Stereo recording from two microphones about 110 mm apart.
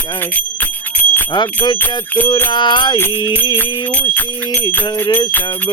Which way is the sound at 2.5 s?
45° left (ahead or behind).